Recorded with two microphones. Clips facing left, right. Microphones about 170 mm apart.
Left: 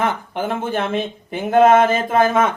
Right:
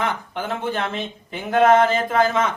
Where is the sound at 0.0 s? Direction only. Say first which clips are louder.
Left 4 dB; 50° left (ahead or behind).